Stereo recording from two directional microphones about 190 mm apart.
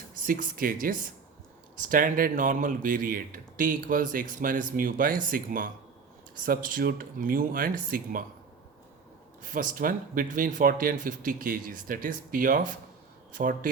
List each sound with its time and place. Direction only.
0.3 s speech: 50° right (ahead or behind)
9.4 s speech: 45° right (ahead or behind)